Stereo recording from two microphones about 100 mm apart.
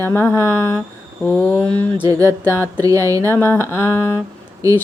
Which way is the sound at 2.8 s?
35° right (ahead or behind).